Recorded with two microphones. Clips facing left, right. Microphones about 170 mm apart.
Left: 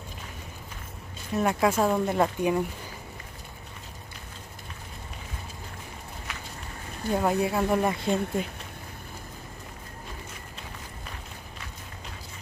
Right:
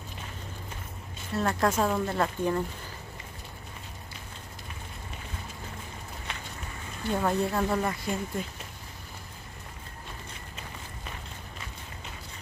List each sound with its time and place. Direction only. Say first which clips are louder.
1.3 s speech: left 3 dB; 15° left (ahead or behind)
7.1 s speech: left 2 dB; 10° left (ahead or behind)
7.8 s speech: left 5 dB; 20° left (ahead or behind)